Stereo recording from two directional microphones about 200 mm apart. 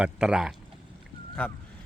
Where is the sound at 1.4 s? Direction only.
5° left (ahead or behind).